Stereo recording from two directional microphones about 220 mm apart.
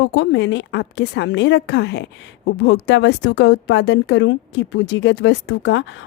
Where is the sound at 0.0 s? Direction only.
55° left (ahead or behind).